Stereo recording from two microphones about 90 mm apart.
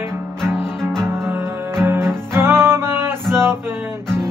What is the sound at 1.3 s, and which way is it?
Music, 25° right (ahead or behind).